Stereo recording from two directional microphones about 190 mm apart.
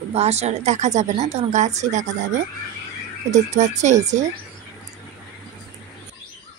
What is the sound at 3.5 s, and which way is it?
Speech, 40° right (ahead or behind).